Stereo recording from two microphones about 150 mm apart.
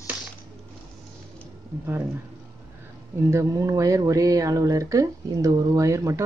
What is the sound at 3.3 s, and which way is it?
Speech, 20° right (ahead or behind).